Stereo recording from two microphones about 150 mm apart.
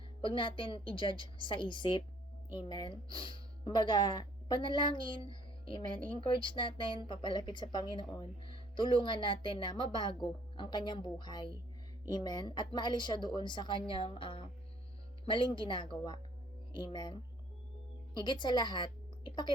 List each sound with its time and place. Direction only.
0.2 s a woman's voice: 35° left (ahead or behind)